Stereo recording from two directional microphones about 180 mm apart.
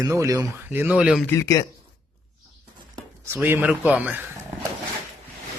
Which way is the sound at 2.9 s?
15° right (ahead or behind).